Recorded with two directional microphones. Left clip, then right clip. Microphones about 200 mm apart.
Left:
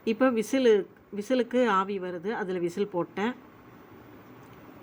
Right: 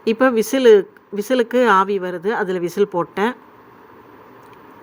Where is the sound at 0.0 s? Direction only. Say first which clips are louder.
Right 9 dB; 15° right (ahead or behind).